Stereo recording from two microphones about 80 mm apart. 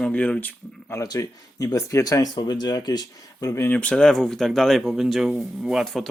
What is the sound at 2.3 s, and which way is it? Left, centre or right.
Speech, left.